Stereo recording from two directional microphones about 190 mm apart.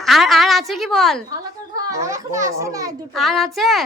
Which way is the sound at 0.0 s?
Centre (ahead or behind).